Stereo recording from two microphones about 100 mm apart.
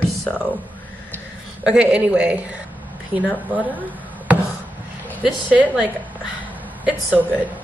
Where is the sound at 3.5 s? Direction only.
15° right (ahead or behind).